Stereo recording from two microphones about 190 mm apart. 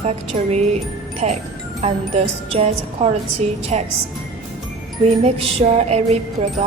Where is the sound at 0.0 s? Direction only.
35° right (ahead or behind).